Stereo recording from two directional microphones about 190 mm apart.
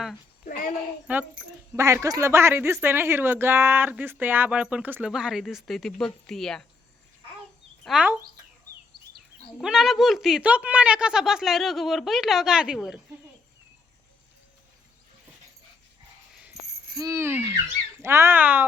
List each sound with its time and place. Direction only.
1.0 s speech: 10° right (ahead or behind)
7.9 s a woman's voice: 5° right (ahead or behind)
9.6 s a woman's voice: centre (ahead or behind)
16.9 s speech: 15° right (ahead or behind)